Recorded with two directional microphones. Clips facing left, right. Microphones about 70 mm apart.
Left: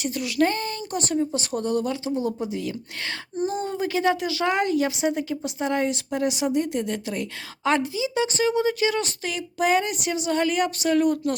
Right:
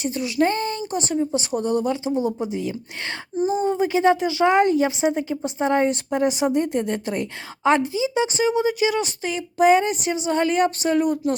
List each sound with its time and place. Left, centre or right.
0.0 s speech: right
10.9 s speech: right